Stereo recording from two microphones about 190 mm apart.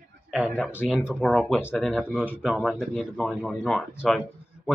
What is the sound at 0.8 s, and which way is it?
Speech, 5° right (ahead or behind).